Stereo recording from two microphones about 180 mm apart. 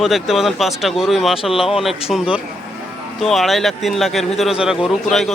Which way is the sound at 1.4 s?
30° left (ahead or behind).